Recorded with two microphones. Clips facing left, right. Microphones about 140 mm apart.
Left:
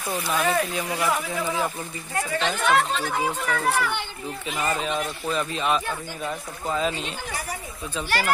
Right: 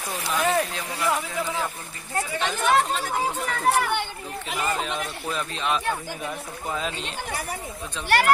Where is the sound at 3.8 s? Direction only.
50° right (ahead or behind).